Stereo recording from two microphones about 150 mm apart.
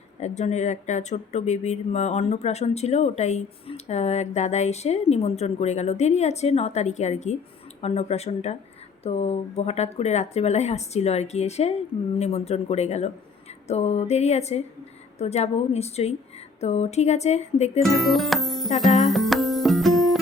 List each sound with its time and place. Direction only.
0.2 s speech: 50° left (ahead or behind)
17.8 s music: centre (ahead or behind)